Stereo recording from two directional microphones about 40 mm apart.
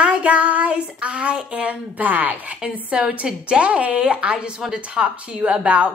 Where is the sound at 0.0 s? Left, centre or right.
Right.